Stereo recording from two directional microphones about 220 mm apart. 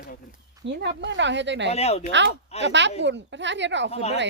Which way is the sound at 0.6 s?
50° right (ahead or behind).